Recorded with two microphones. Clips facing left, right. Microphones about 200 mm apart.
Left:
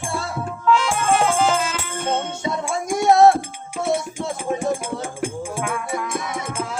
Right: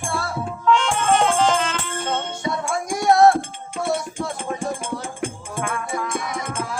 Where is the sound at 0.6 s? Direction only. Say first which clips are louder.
Even; 5° left (ahead or behind).